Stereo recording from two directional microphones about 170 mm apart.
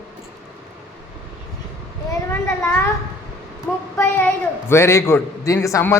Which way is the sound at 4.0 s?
15° left (ahead or behind).